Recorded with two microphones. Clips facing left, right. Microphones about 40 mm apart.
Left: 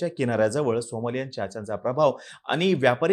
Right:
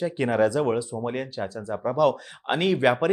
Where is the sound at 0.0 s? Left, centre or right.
Centre.